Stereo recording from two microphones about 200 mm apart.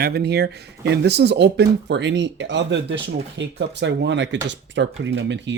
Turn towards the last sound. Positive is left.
turn(degrees=-65)  # may be behind; listen again after turning